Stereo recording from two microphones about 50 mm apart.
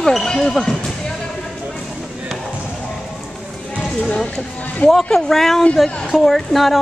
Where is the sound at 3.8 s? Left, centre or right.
Centre.